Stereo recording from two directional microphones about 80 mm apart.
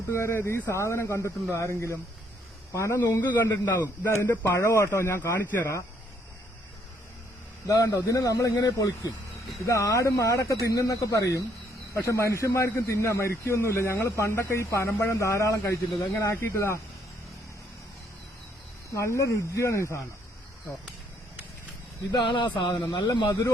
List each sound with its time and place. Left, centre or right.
0.1 s a man's voice: left
3.0 s a man's voice: left
7.7 s speech: left
8.5 s speech: left
9.6 s a man's voice: left
18.9 s a man's voice: left
22.1 s speech: left
23.0 s a man's voice: left